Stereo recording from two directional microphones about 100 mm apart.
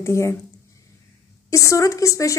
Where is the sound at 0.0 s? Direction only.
25° left (ahead or behind).